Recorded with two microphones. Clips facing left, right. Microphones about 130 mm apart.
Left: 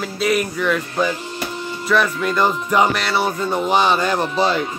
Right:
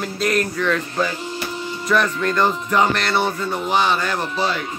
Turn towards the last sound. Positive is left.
turn(degrees=25)  # may be behind; listen again after turning